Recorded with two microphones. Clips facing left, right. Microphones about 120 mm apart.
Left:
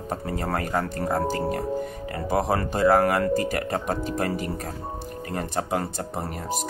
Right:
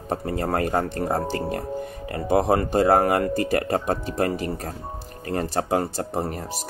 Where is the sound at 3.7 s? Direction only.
40° right (ahead or behind).